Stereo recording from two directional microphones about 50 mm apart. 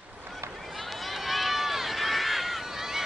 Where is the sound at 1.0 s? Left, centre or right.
Centre.